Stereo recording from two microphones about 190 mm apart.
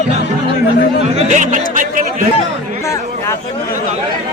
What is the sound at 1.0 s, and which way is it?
Speech, 40° right (ahead or behind).